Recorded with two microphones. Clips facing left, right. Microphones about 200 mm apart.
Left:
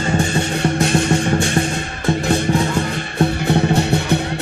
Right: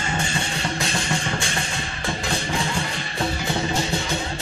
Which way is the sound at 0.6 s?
60° left (ahead or behind).